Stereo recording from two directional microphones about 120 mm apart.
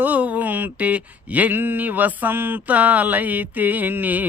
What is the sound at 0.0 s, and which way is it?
Speech, 15° right (ahead or behind).